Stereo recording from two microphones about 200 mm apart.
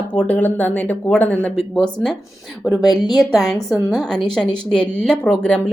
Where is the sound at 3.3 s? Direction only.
Centre (ahead or behind).